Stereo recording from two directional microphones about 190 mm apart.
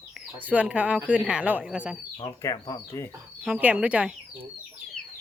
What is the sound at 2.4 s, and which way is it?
Speech, 15° left (ahead or behind).